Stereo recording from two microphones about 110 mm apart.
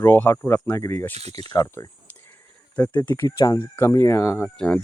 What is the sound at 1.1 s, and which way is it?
Speech, 70° right (ahead or behind).